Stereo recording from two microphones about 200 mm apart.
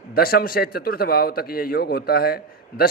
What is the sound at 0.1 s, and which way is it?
Speech, 50° left (ahead or behind).